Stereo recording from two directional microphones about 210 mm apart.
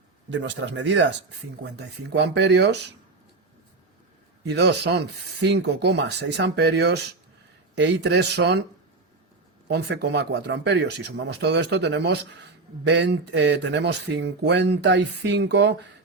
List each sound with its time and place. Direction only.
0.3 s speech: 60° right (ahead or behind)
4.4 s speech: 55° right (ahead or behind)
9.6 s speech: 55° right (ahead or behind)